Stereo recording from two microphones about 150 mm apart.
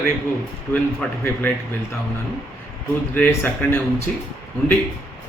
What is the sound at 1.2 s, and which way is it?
Speech, 15° left (ahead or behind).